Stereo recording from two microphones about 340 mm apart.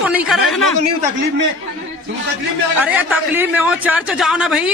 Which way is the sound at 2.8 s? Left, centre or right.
Centre.